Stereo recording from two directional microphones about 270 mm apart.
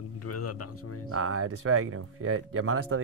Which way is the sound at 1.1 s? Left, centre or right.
Right.